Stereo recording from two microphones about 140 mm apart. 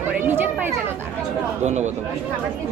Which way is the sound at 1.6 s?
55° right (ahead or behind).